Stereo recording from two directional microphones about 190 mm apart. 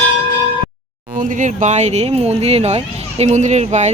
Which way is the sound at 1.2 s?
40° right (ahead or behind).